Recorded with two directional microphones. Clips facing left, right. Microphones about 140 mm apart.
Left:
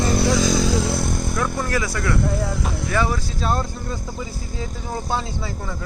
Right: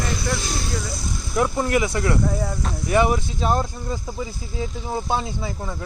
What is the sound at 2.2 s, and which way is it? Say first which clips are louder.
Speech: left 1 dB; 85° left.